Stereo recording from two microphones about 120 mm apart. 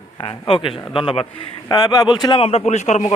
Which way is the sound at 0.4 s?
45° left (ahead or behind).